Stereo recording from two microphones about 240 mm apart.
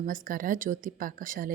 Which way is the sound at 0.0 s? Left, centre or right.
Right.